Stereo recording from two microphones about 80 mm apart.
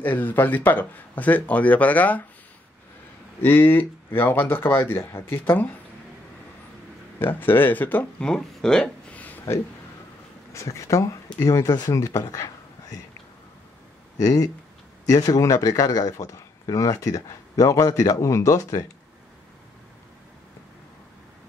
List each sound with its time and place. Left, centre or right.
0.0 s speech: left
3.4 s speech: left
5.0 s speech: left
5.4 s speech: left
7.2 s speech: left
8.2 s a sound: centre
10.5 s speech: left
14.1 s a man's voice: left